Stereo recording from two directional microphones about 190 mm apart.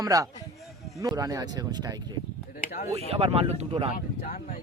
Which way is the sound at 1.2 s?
20° right (ahead or behind).